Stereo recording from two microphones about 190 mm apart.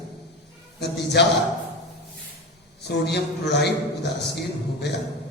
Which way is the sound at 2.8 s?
60° left (ahead or behind).